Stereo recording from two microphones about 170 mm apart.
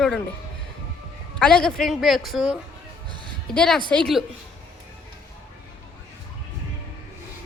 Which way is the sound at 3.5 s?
5° left (ahead or behind).